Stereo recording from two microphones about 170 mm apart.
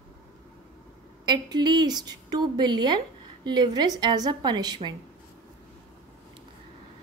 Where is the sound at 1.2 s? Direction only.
25° right (ahead or behind).